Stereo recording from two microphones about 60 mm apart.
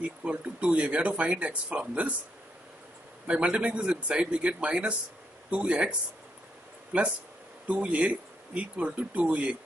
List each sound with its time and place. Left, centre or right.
0.0 s speech: right
3.3 s speech: centre